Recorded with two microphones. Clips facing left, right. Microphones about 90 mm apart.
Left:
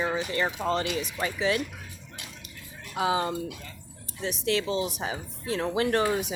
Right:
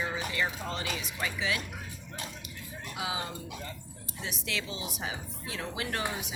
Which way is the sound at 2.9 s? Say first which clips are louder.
Left 10 dB; 45° left (ahead or behind).